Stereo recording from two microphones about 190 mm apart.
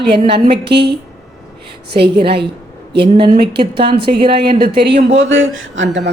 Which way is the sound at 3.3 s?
60° right (ahead or behind).